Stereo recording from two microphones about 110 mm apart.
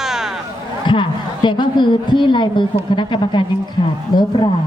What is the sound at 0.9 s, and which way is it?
A woman's voice, 45° left (ahead or behind).